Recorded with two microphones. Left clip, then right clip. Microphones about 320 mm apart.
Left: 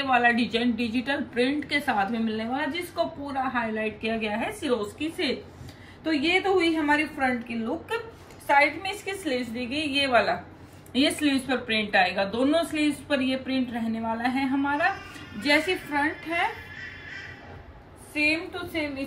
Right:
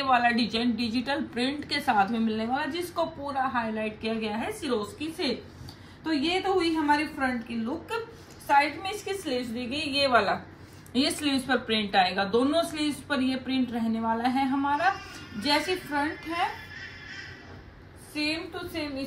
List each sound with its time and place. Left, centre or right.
0.0 s a woman's voice: centre
18.1 s a woman's voice: centre